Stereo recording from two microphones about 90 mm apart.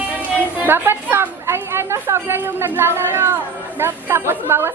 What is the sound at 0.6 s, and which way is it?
Speech, 25° right (ahead or behind).